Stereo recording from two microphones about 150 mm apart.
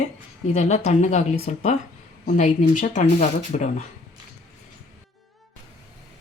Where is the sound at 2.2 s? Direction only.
60° left (ahead or behind).